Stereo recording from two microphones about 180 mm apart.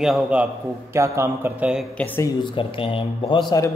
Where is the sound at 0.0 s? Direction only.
5° right (ahead or behind); by 2.3 s 10° left (ahead or behind).